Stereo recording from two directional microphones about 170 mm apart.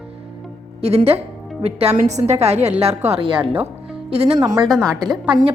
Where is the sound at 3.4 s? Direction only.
10° right (ahead or behind).